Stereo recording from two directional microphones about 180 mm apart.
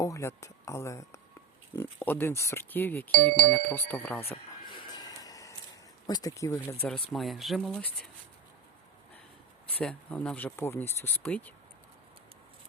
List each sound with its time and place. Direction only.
0.0 s speech: 15° left (ahead or behind)
4.7 s a sound: 25° left (ahead or behind)
6.1 s speech: 20° left (ahead or behind)
9.6 s speech: 10° left (ahead or behind)